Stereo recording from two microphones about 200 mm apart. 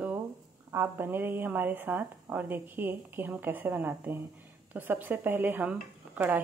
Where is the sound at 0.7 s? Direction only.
10° right (ahead or behind).